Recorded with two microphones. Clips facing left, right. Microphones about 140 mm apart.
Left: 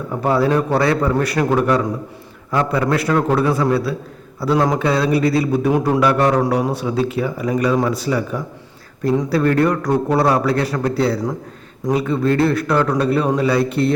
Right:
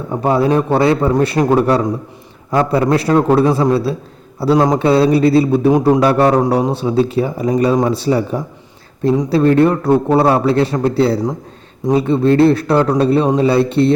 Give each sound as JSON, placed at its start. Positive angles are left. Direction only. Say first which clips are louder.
{"t": 0.1, "sound": "speech", "louder": "right 3 dB", "side_deg": -25}